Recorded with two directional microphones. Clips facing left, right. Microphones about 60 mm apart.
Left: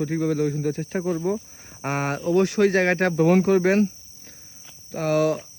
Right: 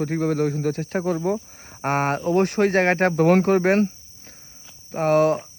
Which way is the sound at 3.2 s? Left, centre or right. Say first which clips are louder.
Left 1 dB; right.